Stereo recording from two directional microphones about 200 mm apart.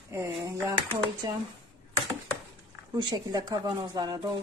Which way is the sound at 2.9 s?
20° right (ahead or behind).